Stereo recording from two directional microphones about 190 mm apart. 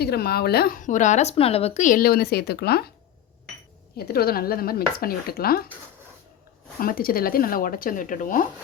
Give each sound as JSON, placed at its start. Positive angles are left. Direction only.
{"t": 0.0, "sound": "speech", "side_deg": 55}
{"t": 3.9, "sound": "speech", "side_deg": 55}
{"t": 6.7, "sound": "speech", "side_deg": 50}